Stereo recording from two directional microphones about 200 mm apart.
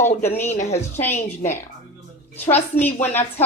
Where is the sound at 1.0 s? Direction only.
10° left (ahead or behind).